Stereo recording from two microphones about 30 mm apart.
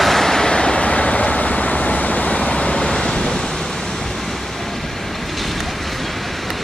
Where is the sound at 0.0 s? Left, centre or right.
Centre; by 2.3 s left.